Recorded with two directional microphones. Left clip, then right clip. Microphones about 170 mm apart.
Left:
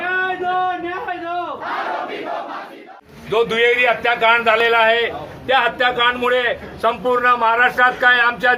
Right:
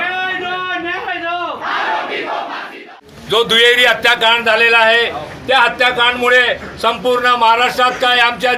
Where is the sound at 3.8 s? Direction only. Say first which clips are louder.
Right 5 dB; 30° right (ahead or behind).